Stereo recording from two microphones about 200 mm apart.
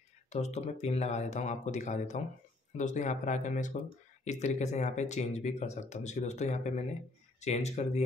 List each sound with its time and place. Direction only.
0.3 s speech: 35° left (ahead or behind)